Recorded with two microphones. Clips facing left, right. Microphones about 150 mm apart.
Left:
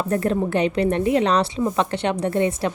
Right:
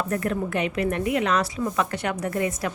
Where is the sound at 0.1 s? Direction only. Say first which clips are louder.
Left 5 dB; 30° left (ahead or behind).